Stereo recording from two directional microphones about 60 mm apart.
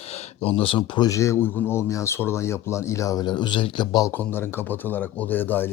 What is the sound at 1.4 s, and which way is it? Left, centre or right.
Speech, left.